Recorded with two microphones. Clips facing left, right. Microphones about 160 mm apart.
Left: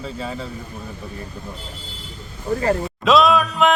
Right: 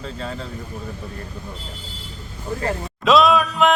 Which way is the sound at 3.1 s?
Centre (ahead or behind).